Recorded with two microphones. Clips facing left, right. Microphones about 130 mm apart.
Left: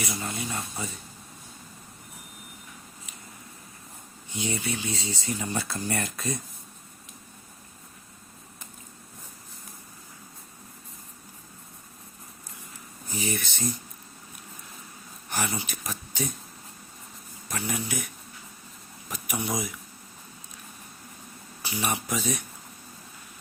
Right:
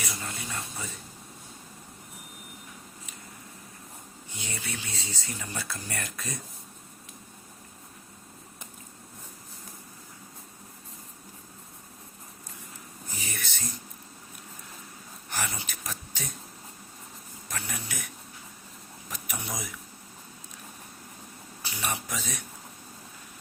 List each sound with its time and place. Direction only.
0.1 s speech: 20° left (ahead or behind)
4.4 s speech: 20° left (ahead or behind)
13.2 s speech: 20° left (ahead or behind)
15.3 s speech: 15° left (ahead or behind)
17.5 s speech: 10° left (ahead or behind)
19.1 s speech: 10° left (ahead or behind)
21.6 s speech: 10° left (ahead or behind)